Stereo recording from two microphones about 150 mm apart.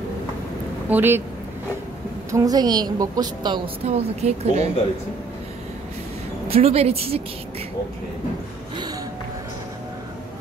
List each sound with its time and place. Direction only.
0.8 s speech: 10° right (ahead or behind)
2.3 s a woman's voice: 25° right (ahead or behind)
3.8 s speech: 45° right (ahead or behind)
6.5 s a woman's voice: 40° right (ahead or behind)